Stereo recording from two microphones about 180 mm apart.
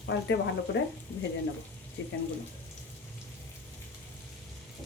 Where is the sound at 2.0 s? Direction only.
70° left (ahead or behind).